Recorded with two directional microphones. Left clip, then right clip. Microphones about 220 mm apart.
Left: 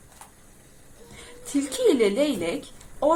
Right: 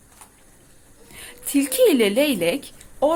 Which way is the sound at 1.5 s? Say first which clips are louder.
Right 4 dB; 40° right (ahead or behind).